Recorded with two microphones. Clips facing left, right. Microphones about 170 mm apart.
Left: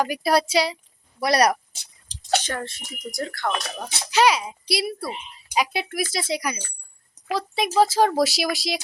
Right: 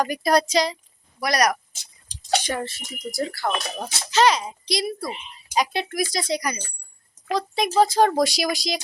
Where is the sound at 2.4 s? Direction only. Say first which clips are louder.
Right 3 dB; 10° right (ahead or behind).